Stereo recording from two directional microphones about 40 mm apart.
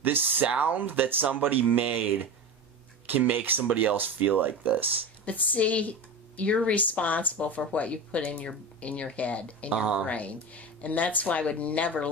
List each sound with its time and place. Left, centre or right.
0.0 s speech: right
3.2 s speech: right
3.6 s speech: right
5.2 s speech: left